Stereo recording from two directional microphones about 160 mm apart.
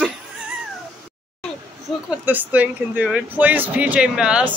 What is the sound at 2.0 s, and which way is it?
Speech, 10° right (ahead or behind).